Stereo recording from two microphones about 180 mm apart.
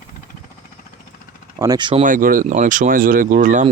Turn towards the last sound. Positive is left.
turn(degrees=-45)  # may be behind; listen again after turning